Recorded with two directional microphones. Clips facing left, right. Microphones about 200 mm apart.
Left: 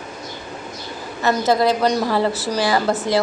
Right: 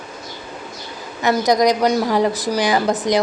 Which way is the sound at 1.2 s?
15° right (ahead or behind).